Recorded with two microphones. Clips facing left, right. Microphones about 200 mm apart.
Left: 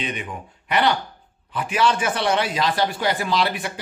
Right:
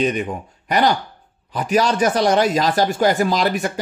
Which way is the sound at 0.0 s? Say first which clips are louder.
Right 9 dB; 40° right (ahead or behind).